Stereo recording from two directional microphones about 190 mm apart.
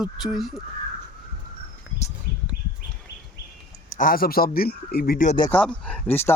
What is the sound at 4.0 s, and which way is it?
A man's voice, 50° left (ahead or behind).